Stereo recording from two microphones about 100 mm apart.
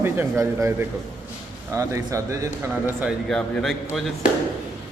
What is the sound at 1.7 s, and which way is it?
Speech, 30° right (ahead or behind).